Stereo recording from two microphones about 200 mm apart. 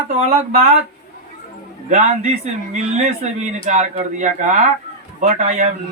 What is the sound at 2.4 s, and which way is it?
Speech, 35° right (ahead or behind).